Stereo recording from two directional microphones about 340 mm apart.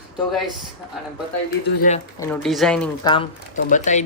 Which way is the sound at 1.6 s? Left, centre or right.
Left.